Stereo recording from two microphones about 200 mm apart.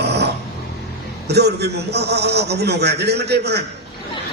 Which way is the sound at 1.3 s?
55° right (ahead or behind).